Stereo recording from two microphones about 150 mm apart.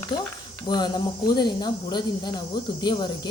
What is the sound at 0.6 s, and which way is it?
Speech, 30° left (ahead or behind).